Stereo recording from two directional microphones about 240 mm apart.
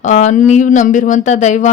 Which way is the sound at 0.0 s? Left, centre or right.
Left.